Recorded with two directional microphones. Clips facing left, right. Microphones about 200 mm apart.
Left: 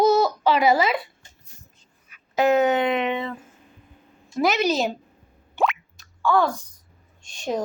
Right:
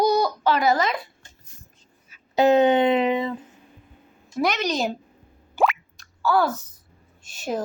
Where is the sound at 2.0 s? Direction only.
30° right (ahead or behind).